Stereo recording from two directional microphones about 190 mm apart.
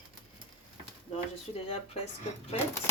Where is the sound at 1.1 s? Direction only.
30° left (ahead or behind).